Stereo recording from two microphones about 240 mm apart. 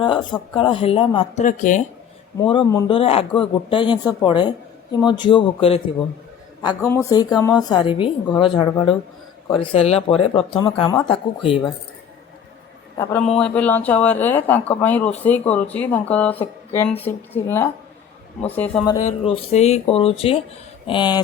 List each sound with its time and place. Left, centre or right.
0.0 s speech: centre
1.5 s speech: left
6.8 s speech: centre
13.0 s speech: centre
19.3 s speech: left